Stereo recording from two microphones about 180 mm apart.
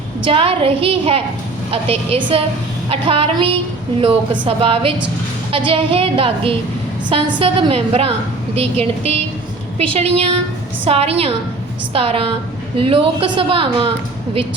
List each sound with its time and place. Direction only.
0.3 s a woman's voice: 30° right (ahead or behind)